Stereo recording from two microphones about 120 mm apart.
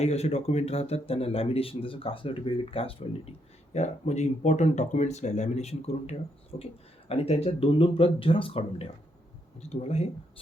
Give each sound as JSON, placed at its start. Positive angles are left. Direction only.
{"t": 0.0, "sound": "speech", "side_deg": 60}
{"t": 9.6, "sound": "speech", "side_deg": 65}